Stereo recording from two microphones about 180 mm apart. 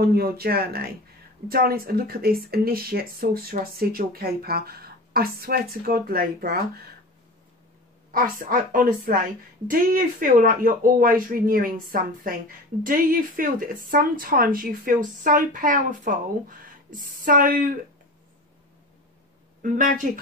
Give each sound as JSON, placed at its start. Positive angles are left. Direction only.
{"t": 0.0, "sound": "speech", "side_deg": -60}
{"t": 8.1, "sound": "a woman's voice", "side_deg": -50}
{"t": 19.6, "sound": "speech", "side_deg": -45}